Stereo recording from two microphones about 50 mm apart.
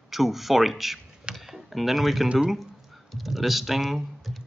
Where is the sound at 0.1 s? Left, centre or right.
Centre.